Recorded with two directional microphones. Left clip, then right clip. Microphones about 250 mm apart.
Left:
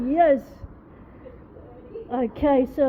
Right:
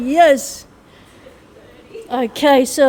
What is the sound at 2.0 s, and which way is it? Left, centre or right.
Speech, right.